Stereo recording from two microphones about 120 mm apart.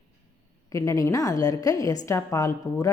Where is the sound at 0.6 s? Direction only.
25° left (ahead or behind).